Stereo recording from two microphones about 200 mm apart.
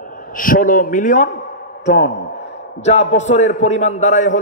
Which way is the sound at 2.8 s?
35° left (ahead or behind).